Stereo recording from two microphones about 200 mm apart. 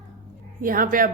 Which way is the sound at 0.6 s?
45° right (ahead or behind).